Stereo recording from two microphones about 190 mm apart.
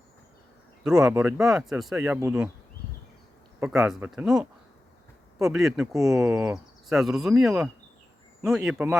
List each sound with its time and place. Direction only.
0.9 s speech: 5° right (ahead or behind)
2.0 s speech: 15° right (ahead or behind)
3.6 s speech: 5° right (ahead or behind)
5.9 s speech: 15° right (ahead or behind)
6.8 s speech: centre (ahead or behind)